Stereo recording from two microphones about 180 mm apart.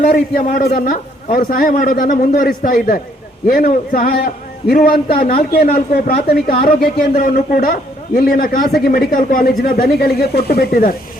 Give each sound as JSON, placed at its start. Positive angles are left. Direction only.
{"t": 0.1, "sound": "a man's voice", "side_deg": 55}